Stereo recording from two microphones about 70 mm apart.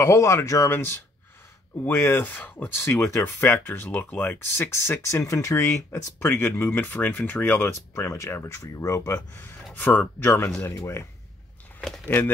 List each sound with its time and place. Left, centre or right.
0.0 s speech: left
0.7 s speech: left
4.8 s speech: left
7.9 s speech: left
9.8 s speech: left